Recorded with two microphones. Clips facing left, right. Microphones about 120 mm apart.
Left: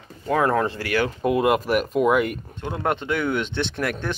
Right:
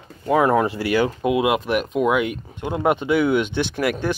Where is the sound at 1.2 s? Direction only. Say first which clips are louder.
Even; 5° right (ahead or behind).